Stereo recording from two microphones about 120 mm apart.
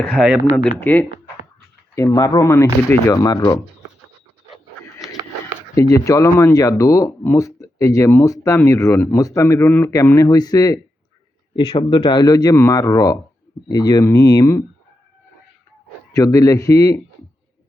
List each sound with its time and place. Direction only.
0.2 s speech: 10° right (ahead or behind)
0.8 s speech: 15° left (ahead or behind)
2.0 s speech: 30° left (ahead or behind)
5.7 s speech: 30° left (ahead or behind)
11.5 s speech: 50° left (ahead or behind); by 14.6 s 30° left (ahead or behind)
16.1 s speech: 30° left (ahead or behind)